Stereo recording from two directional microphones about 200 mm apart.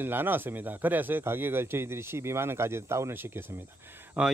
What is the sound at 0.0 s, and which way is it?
Speech, 10° right (ahead or behind).